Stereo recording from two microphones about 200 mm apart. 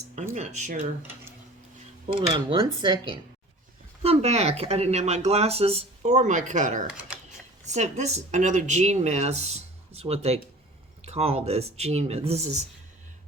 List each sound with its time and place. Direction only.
0.3 s speech: 35° right (ahead or behind)
2.1 s speech: 25° right (ahead or behind)
7.1 s a sound: 5° right (ahead or behind)
7.6 s speech: 35° right (ahead or behind)